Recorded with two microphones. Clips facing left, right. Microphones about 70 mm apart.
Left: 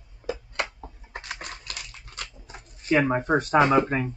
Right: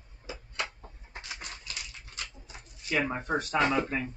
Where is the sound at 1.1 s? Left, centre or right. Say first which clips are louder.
Left 5 dB; left.